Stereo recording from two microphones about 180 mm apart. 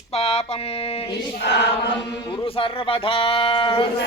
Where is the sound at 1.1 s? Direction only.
70° left (ahead or behind).